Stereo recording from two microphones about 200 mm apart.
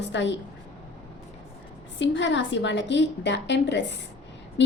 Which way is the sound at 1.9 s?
65° left (ahead or behind).